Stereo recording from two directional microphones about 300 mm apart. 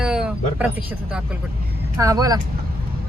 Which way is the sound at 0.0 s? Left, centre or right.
Centre.